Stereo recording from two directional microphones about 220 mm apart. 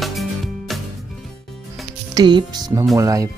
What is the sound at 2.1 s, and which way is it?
Speech, 20° right (ahead or behind).